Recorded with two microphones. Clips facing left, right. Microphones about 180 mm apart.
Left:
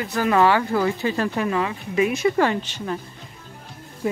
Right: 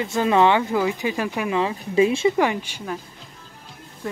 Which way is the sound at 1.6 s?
25° right (ahead or behind).